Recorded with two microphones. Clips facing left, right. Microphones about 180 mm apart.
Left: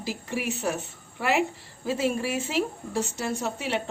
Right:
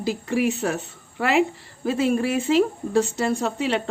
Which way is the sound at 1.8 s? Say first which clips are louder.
Right 5 dB; 60° right (ahead or behind).